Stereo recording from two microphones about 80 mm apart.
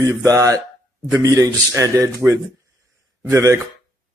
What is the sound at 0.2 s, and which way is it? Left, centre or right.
Speech, right.